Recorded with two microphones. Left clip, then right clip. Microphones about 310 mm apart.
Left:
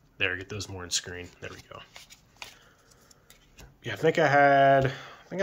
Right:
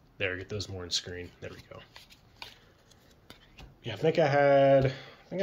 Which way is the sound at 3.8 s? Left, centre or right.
Centre.